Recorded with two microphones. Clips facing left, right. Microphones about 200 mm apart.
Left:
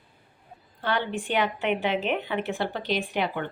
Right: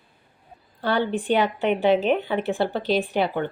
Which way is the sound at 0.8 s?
35° right (ahead or behind).